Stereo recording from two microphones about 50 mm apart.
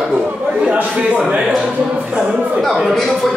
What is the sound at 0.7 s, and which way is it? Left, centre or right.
Speech, right.